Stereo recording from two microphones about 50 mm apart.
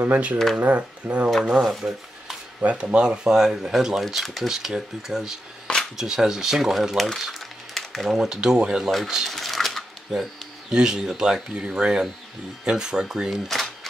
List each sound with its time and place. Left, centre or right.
0.0 s speech: right; by 1.7 s centre
1.7 s stir: centre
2.6 s speech: right; by 7.1 s centre
7.2 s a sound: centre
8.2 s speech: centre
9.3 s cash register: centre
10.7 s speech: centre